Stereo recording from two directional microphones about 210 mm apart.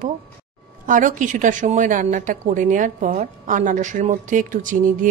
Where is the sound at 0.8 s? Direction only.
40° right (ahead or behind).